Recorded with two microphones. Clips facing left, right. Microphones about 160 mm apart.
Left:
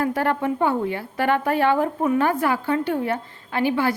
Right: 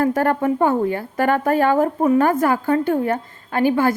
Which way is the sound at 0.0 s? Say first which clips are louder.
Right 4 dB; 45° right (ahead or behind).